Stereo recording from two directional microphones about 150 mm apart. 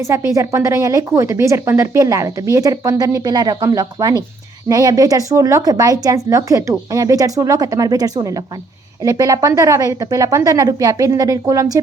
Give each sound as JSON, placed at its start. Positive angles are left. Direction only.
{"t": 0.0, "sound": "speech", "side_deg": -20}